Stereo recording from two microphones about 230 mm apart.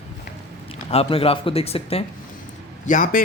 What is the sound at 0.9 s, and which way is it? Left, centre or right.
Speech, left.